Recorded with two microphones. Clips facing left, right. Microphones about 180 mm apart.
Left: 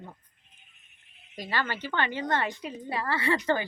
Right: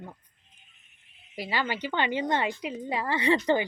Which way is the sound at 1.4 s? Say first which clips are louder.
Right 2 dB; 15° right (ahead or behind).